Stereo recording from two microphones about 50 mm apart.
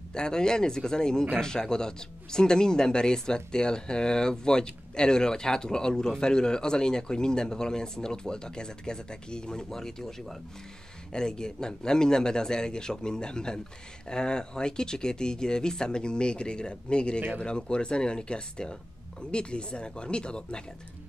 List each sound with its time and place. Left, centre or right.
0.1 s speech: centre